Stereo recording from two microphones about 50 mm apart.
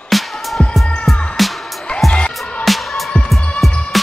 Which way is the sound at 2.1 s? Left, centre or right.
Left.